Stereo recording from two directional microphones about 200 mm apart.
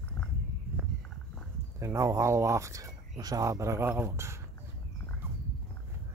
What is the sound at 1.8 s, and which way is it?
Speech, 15° right (ahead or behind).